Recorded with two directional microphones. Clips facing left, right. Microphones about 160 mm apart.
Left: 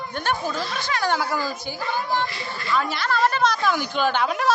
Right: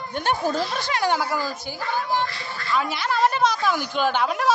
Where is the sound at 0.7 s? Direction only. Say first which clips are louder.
Right 1 dB; 30° right (ahead or behind).